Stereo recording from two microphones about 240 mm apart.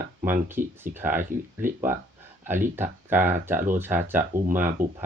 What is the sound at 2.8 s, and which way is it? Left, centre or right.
Speech, centre.